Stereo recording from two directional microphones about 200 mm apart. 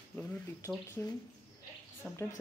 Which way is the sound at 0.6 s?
15° left (ahead or behind).